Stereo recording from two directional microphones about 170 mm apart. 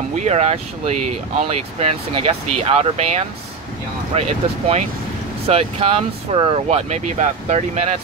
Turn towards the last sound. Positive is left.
turn(degrees=-40)  # may be behind; listen again after turning